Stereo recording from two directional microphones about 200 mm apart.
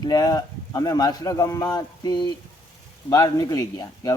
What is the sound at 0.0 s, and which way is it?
A man's voice, 20° left (ahead or behind).